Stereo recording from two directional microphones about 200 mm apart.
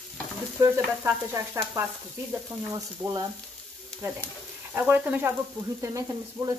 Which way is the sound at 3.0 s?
20° right (ahead or behind).